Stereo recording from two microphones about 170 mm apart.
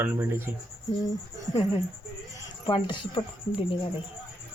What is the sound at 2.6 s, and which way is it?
Speech, 30° left (ahead or behind).